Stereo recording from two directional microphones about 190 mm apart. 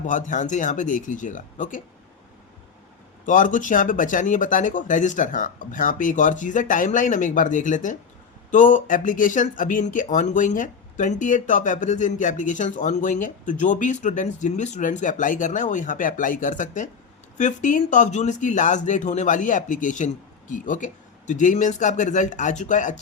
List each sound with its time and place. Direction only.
0.0 s speech: 40° left (ahead or behind)
3.2 s speech: 45° left (ahead or behind)